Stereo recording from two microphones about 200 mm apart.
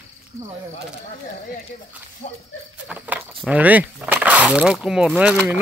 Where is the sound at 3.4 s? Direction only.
5° right (ahead or behind).